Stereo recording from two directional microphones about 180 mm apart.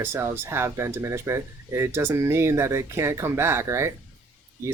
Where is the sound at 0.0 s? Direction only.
15° right (ahead or behind).